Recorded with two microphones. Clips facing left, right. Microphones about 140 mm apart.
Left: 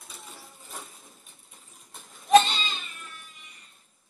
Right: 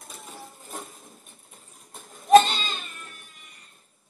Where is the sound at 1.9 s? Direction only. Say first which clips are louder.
Right 3 dB; 50° right (ahead or behind).